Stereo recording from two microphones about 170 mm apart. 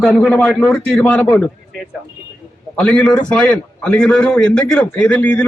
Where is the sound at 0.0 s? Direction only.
5° left (ahead or behind).